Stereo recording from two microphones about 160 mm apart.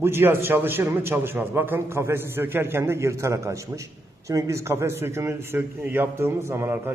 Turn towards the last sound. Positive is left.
turn(degrees=-15)  # may be behind; listen again after turning